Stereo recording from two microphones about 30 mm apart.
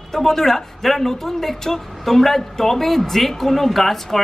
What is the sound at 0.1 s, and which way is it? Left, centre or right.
A woman's voice, centre.